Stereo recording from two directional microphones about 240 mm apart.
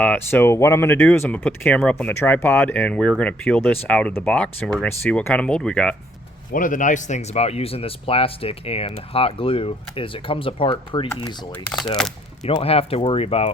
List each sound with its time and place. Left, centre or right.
0.0 s speech: centre
6.5 s speech: left
12.4 s speech: left